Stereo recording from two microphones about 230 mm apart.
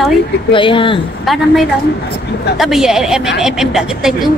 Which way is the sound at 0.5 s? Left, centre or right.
Left.